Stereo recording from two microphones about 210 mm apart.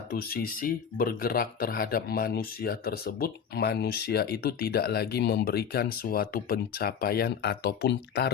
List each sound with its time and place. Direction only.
0.1 s speech: 45° left (ahead or behind)